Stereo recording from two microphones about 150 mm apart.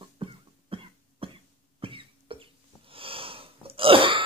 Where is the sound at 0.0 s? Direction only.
35° right (ahead or behind).